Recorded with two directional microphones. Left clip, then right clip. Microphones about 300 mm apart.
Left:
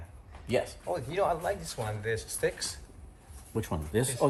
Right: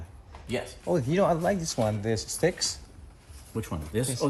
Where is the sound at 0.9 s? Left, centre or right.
Right.